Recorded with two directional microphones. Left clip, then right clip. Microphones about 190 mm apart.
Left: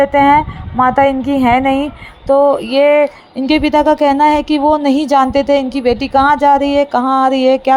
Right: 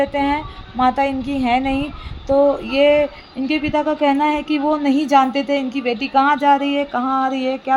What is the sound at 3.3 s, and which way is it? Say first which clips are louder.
Speech: left 8 dB; 35° left (ahead or behind).